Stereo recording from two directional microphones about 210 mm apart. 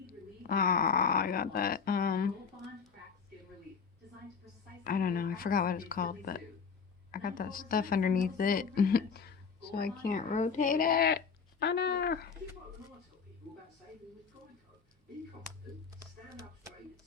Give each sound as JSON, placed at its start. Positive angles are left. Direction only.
{"t": 0.1, "sound": "speech", "side_deg": 45}
{"t": 4.8, "sound": "speech", "side_deg": 45}